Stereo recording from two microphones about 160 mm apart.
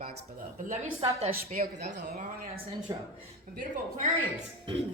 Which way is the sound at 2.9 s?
25° right (ahead or behind).